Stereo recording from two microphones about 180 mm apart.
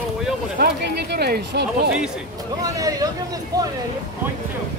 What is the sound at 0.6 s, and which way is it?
Speech, 60° right (ahead or behind).